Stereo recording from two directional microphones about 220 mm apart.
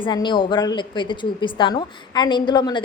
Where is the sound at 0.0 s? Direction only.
20° left (ahead or behind).